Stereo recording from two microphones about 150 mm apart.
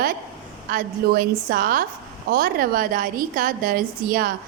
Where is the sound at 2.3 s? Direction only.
90° right; by 4.3 s 75° right (ahead or behind).